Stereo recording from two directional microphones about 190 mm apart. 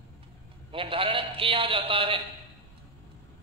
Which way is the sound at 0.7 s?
30° right (ahead or behind).